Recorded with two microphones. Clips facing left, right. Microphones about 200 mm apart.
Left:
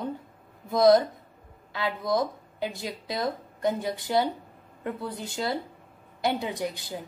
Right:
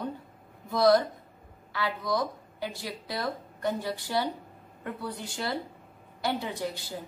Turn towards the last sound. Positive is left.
turn(degrees=20)  # may be behind; listen again after turning